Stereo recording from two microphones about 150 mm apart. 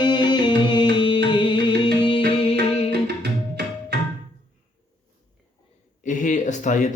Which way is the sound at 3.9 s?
90° right.